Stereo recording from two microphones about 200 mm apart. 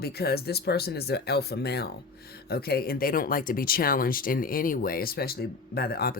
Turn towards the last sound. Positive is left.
turn(degrees=50)  # may be behind; listen again after turning